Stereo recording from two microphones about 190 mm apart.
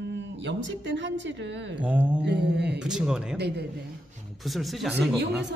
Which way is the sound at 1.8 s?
5° right (ahead or behind).